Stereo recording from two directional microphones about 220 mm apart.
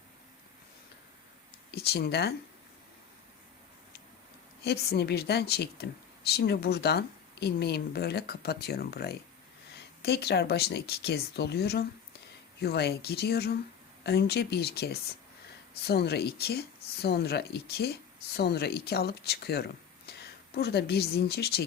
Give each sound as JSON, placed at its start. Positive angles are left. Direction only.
{"t": 1.7, "sound": "speech", "side_deg": 45}
{"t": 4.6, "sound": "speech", "side_deg": 45}